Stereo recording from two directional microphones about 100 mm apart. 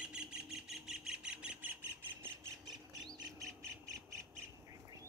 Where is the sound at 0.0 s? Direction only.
10° right (ahead or behind).